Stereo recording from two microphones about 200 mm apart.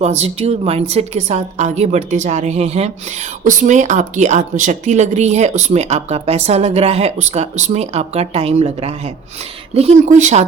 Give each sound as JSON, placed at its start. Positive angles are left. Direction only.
{"t": 0.0, "sound": "speech", "side_deg": -35}